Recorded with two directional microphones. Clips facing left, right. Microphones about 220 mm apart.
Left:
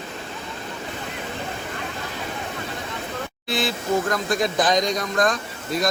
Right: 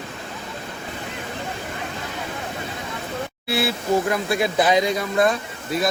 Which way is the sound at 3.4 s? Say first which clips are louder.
Right 2 dB; 10° right (ahead or behind).